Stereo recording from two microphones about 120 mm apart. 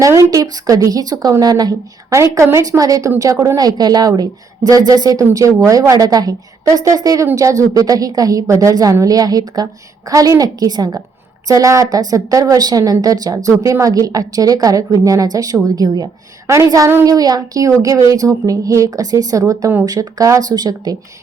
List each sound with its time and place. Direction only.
0.0 s a woman's voice: 25° right (ahead or behind)